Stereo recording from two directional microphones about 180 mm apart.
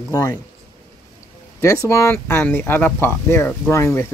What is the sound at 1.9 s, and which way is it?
Speech, 15° left (ahead or behind).